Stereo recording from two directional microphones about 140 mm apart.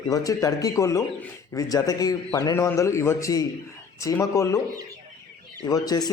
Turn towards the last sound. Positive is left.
turn(degrees=30)  # may be behind; listen again after turning